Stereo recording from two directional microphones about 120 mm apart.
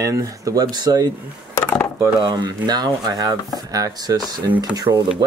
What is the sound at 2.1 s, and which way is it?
Speech, 35° right (ahead or behind).